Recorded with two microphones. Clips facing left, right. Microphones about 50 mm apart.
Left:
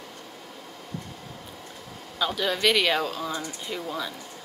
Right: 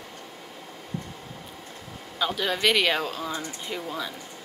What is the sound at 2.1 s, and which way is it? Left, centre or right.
Speech, centre.